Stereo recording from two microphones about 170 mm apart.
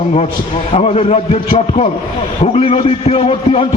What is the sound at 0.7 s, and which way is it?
Speech, 35° left (ahead or behind).